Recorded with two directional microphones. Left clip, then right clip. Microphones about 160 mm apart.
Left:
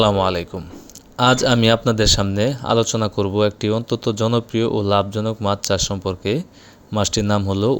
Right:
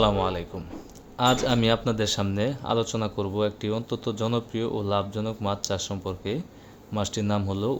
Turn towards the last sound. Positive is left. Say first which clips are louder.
# left 8 dB
turn(degrees=35)  # may be behind; listen again after turning